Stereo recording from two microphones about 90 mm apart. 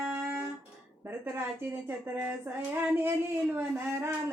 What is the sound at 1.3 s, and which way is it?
Speech, 20° right (ahead or behind).